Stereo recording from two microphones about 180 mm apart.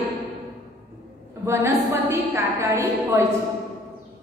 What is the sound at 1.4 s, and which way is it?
A woman's voice, 15° right (ahead or behind).